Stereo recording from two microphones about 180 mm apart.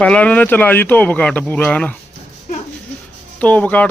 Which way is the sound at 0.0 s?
5° left (ahead or behind).